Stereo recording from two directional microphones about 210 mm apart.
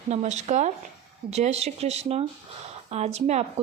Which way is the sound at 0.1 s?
35° right (ahead or behind).